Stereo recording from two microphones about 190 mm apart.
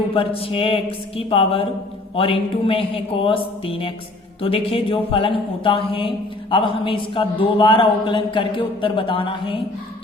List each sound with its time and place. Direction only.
0.1 s speech: 30° left (ahead or behind)